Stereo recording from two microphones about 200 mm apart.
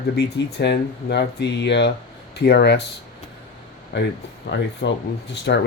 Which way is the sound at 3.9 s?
60° left (ahead or behind).